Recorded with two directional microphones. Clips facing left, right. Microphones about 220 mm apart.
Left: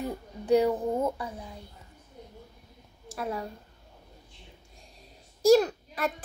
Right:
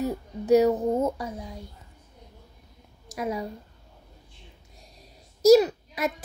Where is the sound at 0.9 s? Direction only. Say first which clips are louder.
Right 3 dB; 20° right (ahead or behind).